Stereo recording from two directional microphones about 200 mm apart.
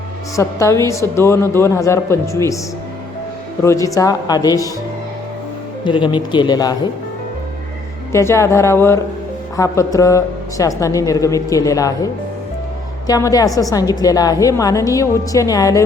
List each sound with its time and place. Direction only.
0.3 s speech: 15° left (ahead or behind)
3.6 s speech: 15° left (ahead or behind)
5.8 s a man's voice: 25° left (ahead or behind)
8.1 s speech: 15° left (ahead or behind)